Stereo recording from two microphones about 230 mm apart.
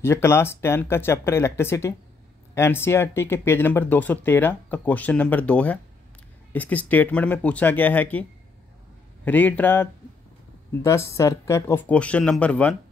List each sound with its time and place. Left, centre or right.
0.0 s speech: centre